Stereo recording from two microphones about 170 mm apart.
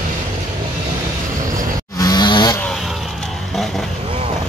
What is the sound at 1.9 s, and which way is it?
Cattle, 25° left (ahead or behind).